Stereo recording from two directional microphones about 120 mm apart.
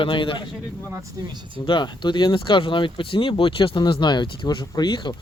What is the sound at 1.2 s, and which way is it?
Speech, 30° right (ahead or behind).